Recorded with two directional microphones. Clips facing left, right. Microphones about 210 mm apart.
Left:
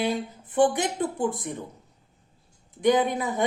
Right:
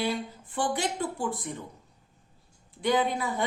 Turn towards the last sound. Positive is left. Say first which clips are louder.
# left 3 dB
turn(degrees=20)  # may be behind; listen again after turning